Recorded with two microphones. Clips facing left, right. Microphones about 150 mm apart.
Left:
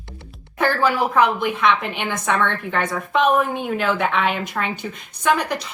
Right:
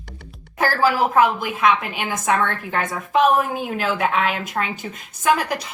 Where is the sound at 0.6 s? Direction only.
Centre (ahead or behind).